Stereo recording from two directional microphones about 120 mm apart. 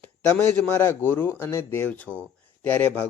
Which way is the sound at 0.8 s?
20° left (ahead or behind).